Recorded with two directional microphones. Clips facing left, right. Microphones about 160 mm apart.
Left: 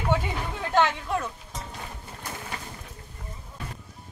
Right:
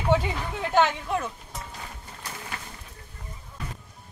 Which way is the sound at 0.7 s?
10° right (ahead or behind).